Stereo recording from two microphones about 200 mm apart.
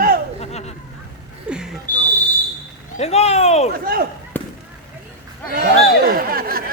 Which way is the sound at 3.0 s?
30° left (ahead or behind).